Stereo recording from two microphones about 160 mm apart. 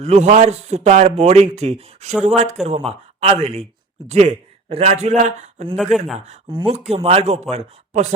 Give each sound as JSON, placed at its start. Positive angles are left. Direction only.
{"t": 0.0, "sound": "a man's voice", "side_deg": -45}
{"t": 5.7, "sound": "speech", "side_deg": 0}
{"t": 6.1, "sound": "a man's voice", "side_deg": -45}